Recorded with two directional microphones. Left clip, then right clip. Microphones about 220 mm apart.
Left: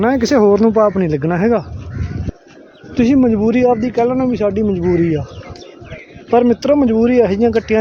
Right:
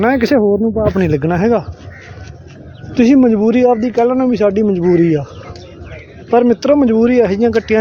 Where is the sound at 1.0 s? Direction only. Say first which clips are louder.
Right 2 dB; 5° right (ahead or behind).